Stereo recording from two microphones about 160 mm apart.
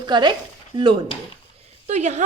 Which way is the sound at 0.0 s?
30° right (ahead or behind).